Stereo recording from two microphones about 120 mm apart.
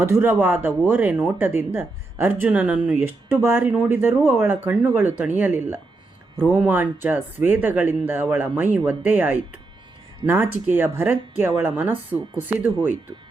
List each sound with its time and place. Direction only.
0.0 s speech: 20° right (ahead or behind)